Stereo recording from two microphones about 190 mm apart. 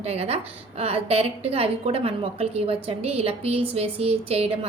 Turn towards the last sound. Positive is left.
turn(degrees=-30)  # may be behind; listen again after turning